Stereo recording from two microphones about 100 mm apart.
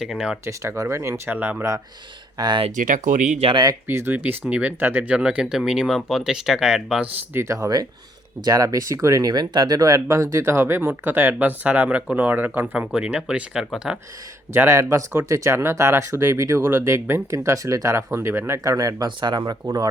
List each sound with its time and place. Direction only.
0.0 s speech: 5° right (ahead or behind)
0.4 s speech: 25° right (ahead or behind)
2.4 s speech: 50° right (ahead or behind)
3.8 s speech: 20° right (ahead or behind); by 7.1 s 5° right (ahead or behind)
7.3 s speech: 30° right (ahead or behind); by 14.0 s 10° right (ahead or behind)
14.5 s speech: 25° right (ahead or behind); by 19.5 s 50° right (ahead or behind)
19.6 s speech: 35° right (ahead or behind)